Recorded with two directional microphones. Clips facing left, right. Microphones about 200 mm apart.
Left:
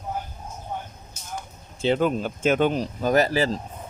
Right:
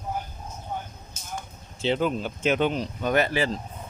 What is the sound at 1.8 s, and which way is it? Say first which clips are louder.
Speech: left 3 dB; 50° left (ahead or behind).